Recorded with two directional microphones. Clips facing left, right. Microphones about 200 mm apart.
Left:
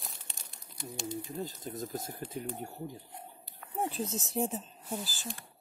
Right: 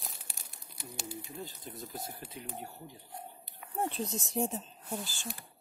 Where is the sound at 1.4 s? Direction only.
45° left (ahead or behind).